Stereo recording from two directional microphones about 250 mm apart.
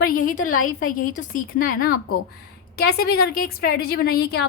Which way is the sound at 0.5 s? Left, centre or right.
Left.